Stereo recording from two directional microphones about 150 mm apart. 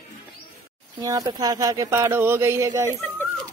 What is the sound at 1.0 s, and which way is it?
Speech, 25° right (ahead or behind).